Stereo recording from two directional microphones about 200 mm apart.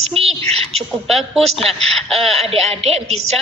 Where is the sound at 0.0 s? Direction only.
30° right (ahead or behind).